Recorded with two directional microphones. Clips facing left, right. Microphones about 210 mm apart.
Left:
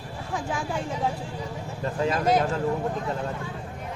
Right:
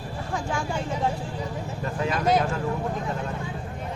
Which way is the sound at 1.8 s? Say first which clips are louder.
Left 2 dB; 30° left (ahead or behind).